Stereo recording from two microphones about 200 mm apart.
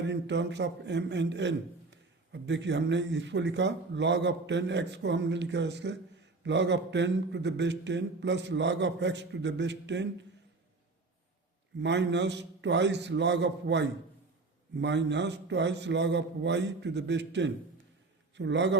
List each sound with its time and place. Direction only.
0.0 s a man's voice: 60° right (ahead or behind)
11.8 s a man's voice: 60° right (ahead or behind)